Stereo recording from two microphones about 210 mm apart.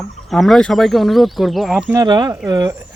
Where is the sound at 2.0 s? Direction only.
20° right (ahead or behind).